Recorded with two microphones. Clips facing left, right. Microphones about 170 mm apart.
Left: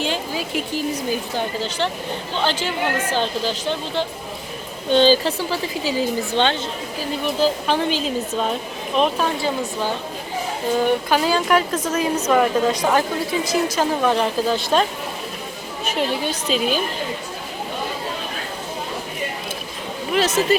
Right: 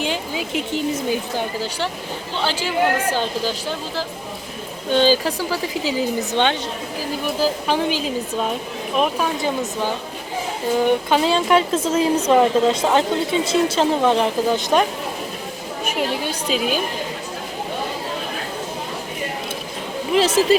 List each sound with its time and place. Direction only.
0.0 s a woman's voice: 15° right (ahead or behind)
2.4 s speech: 10° right (ahead or behind)
10.8 s speech: 25° right (ahead or behind); by 16.8 s 10° right (ahead or behind)
20.1 s speech: 30° right (ahead or behind)